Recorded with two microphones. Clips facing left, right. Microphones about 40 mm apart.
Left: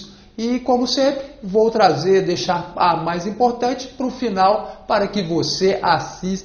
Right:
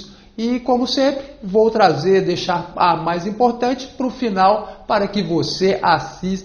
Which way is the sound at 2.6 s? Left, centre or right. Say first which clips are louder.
Right 1 dB; centre.